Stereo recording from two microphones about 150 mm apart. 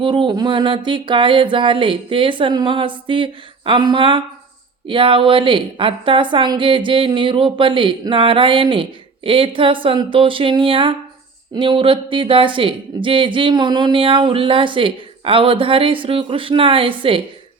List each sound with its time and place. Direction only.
0.0 s a woman's voice: 35° right (ahead or behind)